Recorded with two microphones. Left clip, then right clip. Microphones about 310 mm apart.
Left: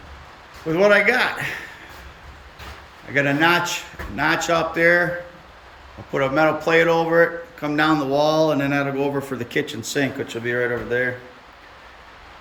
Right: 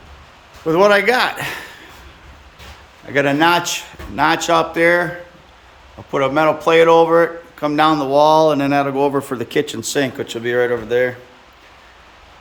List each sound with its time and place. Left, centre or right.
0.7 s speech: centre
3.1 s speech: centre
6.1 s speech: centre